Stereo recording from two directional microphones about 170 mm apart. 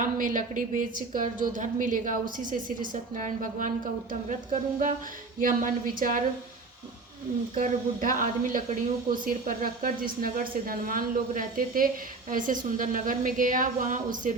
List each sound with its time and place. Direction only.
0.0 s a woman's voice: 50° right (ahead or behind)
7.5 s a woman's voice: 50° right (ahead or behind)